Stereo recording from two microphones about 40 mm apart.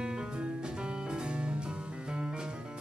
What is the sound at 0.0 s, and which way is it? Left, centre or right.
Music, right.